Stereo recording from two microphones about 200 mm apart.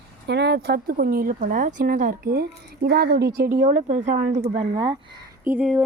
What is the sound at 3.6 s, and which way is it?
Speech, 40° right (ahead or behind).